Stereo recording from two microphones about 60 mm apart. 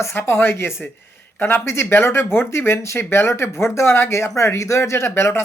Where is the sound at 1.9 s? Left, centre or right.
Left.